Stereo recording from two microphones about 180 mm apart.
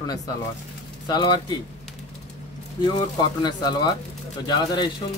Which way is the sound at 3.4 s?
25° left (ahead or behind).